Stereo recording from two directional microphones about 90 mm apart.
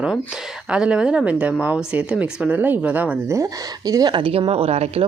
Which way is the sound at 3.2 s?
40° right (ahead or behind).